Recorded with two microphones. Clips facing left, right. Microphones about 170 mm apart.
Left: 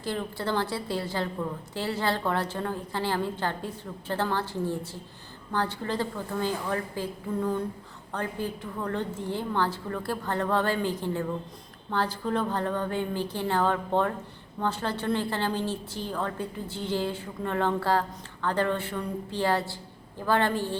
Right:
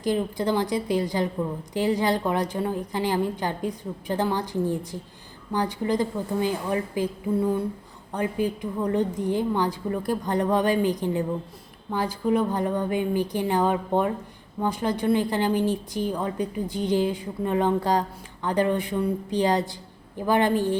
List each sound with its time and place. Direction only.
0.0 s a woman's voice: 15° right (ahead or behind)